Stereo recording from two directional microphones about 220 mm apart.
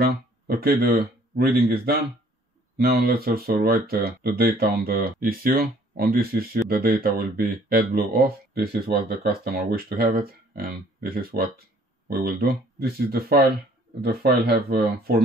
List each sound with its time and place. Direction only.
0.0 s speech: 45° right (ahead or behind)